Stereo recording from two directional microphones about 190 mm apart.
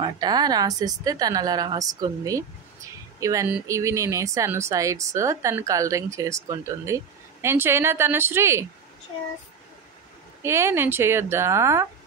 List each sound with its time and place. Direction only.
0.0 s a woman's voice: 20° right (ahead or behind)
10.4 s speech: 15° right (ahead or behind)